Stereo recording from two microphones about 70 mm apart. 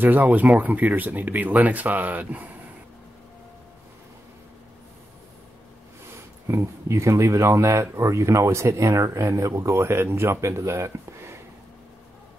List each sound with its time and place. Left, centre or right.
0.0 s speech: right
6.4 s speech: right